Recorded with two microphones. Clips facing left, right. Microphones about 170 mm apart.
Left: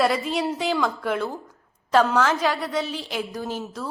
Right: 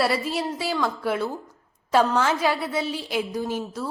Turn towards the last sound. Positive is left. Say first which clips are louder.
# right 3 dB
turn(degrees=-10)  # may be behind; listen again after turning